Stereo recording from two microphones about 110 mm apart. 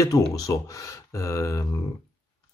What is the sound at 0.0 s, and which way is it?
Speech, 30° left (ahead or behind).